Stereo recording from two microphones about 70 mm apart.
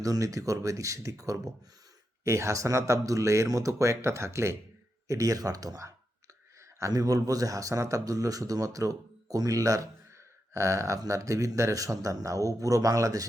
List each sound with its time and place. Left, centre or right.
0.0 s speech: right
2.2 s speech: right
5.0 s a man's voice: right
6.9 s a man's voice: right